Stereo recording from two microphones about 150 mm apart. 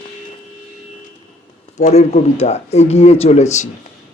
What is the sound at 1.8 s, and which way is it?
Speech, 45° left (ahead or behind).